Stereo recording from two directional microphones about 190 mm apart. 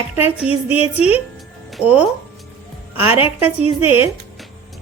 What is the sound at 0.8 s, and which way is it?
Speech, 35° left (ahead or behind).